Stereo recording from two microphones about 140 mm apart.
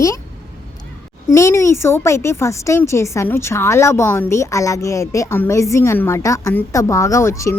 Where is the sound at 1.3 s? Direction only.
20° left (ahead or behind).